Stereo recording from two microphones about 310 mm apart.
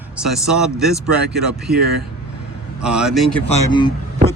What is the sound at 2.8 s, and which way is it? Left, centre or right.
Speech, centre.